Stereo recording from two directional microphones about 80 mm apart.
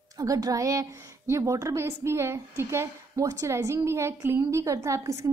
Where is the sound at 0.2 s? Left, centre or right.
Right.